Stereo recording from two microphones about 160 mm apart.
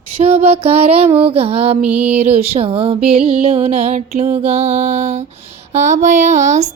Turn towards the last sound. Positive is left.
turn(degrees=-50)  # may be behind; listen again after turning